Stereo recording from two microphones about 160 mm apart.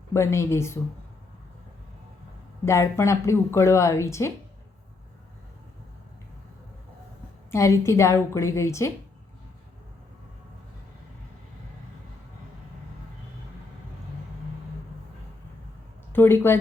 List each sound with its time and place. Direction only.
0.1 s speech: 15° left (ahead or behind)
2.6 s speech: 20° left (ahead or behind)
7.5 s speech: 20° left (ahead or behind)
16.1 s speech: 15° left (ahead or behind)